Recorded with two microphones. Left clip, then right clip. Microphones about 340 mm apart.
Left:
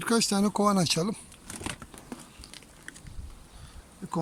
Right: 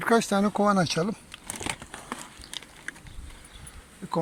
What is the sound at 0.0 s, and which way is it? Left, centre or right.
Speech, centre.